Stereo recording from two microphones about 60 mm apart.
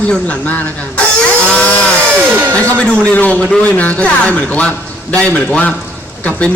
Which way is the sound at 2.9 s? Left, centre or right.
Left.